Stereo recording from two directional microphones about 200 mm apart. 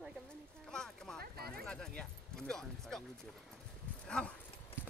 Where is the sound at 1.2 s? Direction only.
50° right (ahead or behind).